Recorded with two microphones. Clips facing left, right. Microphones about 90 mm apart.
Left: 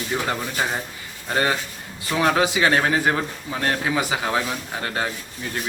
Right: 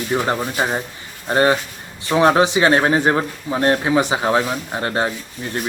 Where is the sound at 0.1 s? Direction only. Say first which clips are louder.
Right 6 dB; 20° right (ahead or behind).